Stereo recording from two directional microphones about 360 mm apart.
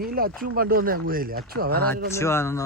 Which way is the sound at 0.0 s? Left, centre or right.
Right.